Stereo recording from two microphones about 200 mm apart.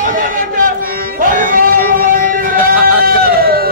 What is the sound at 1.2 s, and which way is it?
Music, 45° right (ahead or behind).